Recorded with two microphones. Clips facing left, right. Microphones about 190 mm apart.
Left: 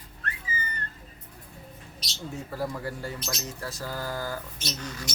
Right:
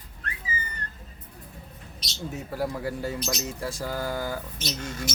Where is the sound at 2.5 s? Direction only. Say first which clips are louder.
Right 3 dB; 10° right (ahead or behind).